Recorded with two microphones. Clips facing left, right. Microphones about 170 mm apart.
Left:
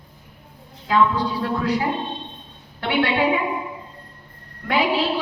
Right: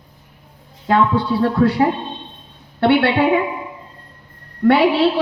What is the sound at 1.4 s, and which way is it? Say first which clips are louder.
A woman's voice: right 9 dB; 60° right (ahead or behind).